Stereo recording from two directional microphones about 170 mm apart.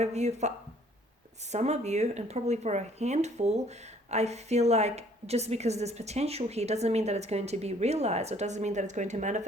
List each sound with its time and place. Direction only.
0.0 s speech: 40° right (ahead or behind)